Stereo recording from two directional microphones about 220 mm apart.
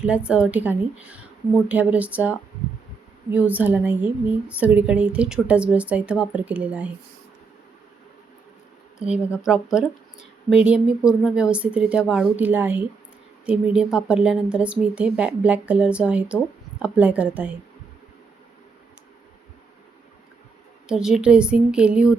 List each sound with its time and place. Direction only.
0.0 s a woman's voice: 5° right (ahead or behind)
3.3 s a woman's voice: 5° right (ahead or behind)
9.4 s a woman's voice: centre (ahead or behind)
20.8 s a woman's voice: 5° right (ahead or behind)